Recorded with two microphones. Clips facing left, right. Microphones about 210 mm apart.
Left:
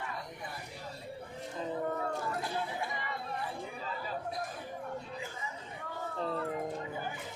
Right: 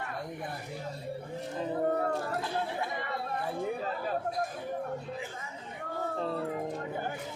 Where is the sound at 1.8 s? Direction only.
45° right (ahead or behind).